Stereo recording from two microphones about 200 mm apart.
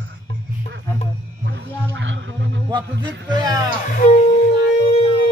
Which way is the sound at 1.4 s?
65° right (ahead or behind).